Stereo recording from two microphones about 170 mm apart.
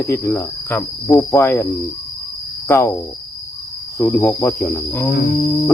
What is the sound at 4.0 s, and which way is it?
Cricket, 15° left (ahead or behind).